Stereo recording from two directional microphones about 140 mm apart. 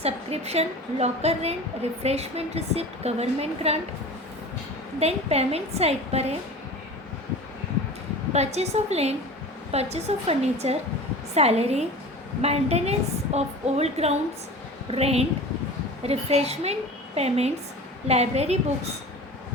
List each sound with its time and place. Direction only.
0.0 s a woman's voice: 50° right (ahead or behind)
4.9 s a woman's voice: 50° right (ahead or behind)
8.3 s a woman's voice: 50° right (ahead or behind)